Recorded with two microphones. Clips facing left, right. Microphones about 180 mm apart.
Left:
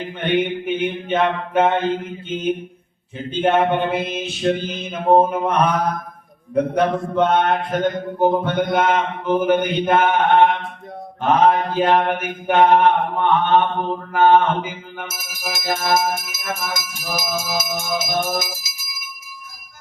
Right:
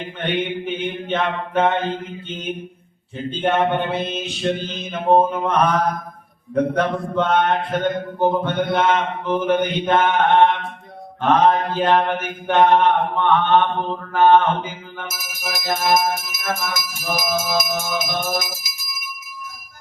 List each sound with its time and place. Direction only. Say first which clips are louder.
0.2 s mantra: left 3 dB; 10° left (ahead or behind)
3.2 s mantra: left 2 dB; 10° left (ahead or behind)
15.1 s music: even; 25° left (ahead or behind)